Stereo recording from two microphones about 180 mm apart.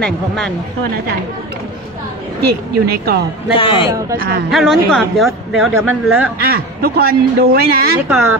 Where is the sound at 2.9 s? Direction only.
60° right (ahead or behind).